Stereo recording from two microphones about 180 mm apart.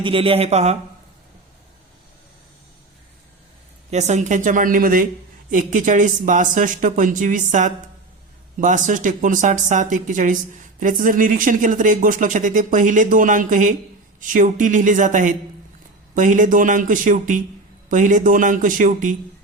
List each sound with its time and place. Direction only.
0.0 s a man's voice: 30° right (ahead or behind)
3.9 s speech: 40° right (ahead or behind)